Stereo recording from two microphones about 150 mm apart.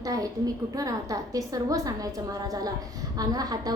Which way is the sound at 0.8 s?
25° right (ahead or behind).